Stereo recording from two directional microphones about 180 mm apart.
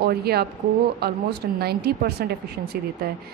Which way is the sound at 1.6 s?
60° right (ahead or behind).